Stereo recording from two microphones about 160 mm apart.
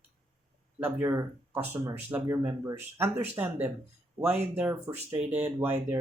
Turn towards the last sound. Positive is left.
turn(degrees=-10)  # may be behind; listen again after turning